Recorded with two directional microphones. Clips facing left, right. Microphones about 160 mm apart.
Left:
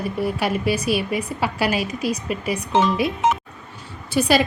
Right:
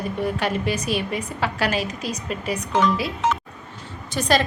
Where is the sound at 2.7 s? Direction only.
25° left (ahead or behind).